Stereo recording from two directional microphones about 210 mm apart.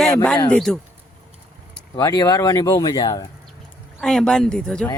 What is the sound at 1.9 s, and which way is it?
Speech, 15° left (ahead or behind).